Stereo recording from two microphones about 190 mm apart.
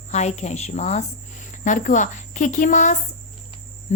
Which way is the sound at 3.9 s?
40° left (ahead or behind).